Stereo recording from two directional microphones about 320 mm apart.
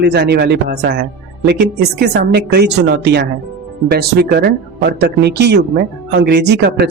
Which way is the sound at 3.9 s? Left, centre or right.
Right.